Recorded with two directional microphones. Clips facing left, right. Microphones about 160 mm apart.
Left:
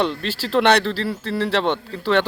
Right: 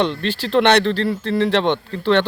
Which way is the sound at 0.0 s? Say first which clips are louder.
Right 2 dB; 5° left (ahead or behind).